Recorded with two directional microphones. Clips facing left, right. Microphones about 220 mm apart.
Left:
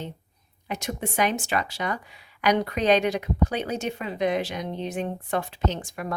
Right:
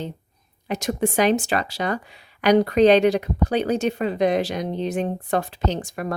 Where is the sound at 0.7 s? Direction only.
35° right (ahead or behind).